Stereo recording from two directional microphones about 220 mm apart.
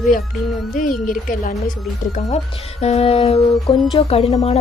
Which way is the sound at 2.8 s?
30° left (ahead or behind).